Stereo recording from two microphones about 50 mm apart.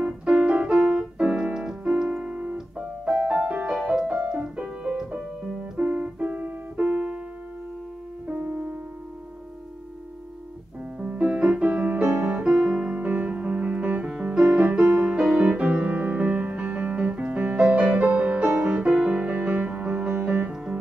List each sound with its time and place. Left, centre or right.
0.0 s keyboard: centre
3.1 s music: centre
5.8 s keyboard: right
11.0 s piano: right
11.6 s music: right
12.4 s keyboard: centre
13.0 s music: right
15.4 s music: right
18.6 s music: centre